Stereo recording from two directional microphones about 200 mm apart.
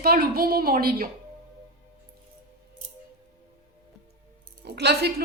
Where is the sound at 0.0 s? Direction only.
50° right (ahead or behind).